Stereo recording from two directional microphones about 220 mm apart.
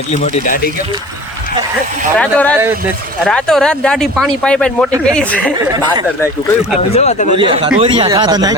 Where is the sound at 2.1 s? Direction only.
5° left (ahead or behind).